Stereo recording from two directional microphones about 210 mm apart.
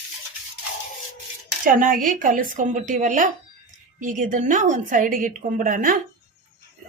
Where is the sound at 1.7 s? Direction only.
40° right (ahead or behind).